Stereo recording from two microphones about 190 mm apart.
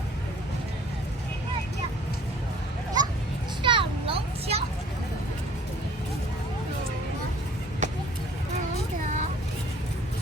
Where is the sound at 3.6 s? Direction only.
25° right (ahead or behind).